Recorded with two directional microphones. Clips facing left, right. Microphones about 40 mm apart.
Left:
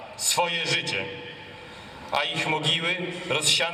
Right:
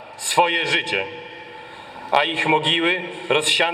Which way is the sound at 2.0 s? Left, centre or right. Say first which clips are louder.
Right 8 dB; right.